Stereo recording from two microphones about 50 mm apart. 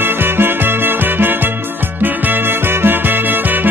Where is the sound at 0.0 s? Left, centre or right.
Right.